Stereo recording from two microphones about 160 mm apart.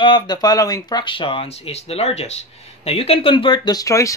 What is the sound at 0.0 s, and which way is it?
Speech, 30° left (ahead or behind).